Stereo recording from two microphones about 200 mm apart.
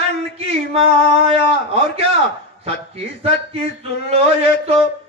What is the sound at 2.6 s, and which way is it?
A man's voice, 30° right (ahead or behind).